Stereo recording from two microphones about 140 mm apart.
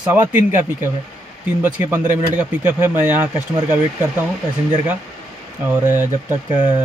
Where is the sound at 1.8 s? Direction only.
15° right (ahead or behind).